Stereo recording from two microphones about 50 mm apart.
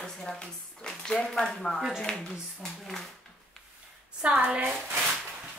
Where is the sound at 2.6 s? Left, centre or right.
Centre.